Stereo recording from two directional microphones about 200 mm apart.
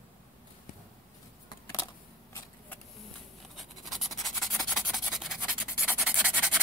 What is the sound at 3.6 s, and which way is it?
Rub, centre (ahead or behind).